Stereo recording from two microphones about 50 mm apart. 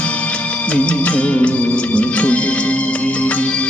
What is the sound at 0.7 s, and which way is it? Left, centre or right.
Music, left.